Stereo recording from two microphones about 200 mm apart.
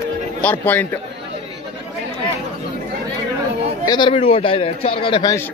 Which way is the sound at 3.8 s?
25° left (ahead or behind).